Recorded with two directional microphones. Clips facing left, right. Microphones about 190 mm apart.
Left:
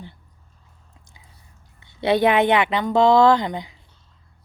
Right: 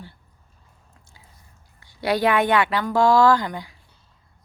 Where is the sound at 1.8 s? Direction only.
25° left (ahead or behind).